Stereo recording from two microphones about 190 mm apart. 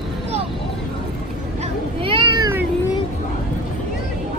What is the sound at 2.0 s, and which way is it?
Cat, 25° right (ahead or behind).